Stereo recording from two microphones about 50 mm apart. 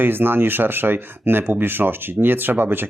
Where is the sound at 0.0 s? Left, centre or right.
Right.